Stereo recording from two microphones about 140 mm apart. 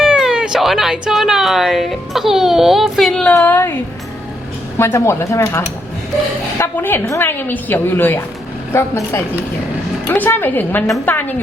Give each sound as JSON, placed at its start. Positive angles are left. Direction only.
{"t": 0.0, "sound": "speech", "side_deg": -5}
{"t": 4.8, "sound": "a woman's voice", "side_deg": 20}